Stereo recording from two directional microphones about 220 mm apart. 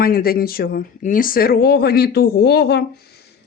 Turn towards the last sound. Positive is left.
turn(degrees=45)  # may be behind; listen again after turning